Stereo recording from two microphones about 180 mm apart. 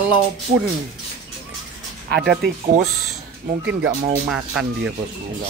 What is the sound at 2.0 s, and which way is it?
Speech, 65° right (ahead or behind).